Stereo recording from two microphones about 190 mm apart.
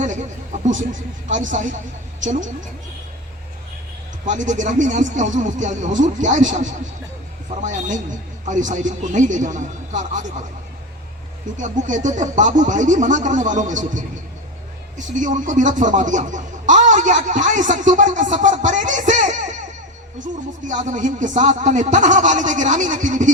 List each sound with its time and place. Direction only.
0.0 s a sound: 40° right (ahead or behind)
1.3 s speech: 40° right (ahead or behind)
4.3 s speech: 40° right (ahead or behind)
11.5 s speech: 40° right (ahead or behind)